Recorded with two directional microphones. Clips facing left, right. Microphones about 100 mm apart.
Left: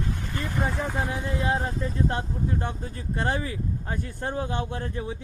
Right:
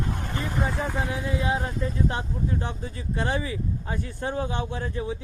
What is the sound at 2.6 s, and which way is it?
Speech, 50° left (ahead or behind).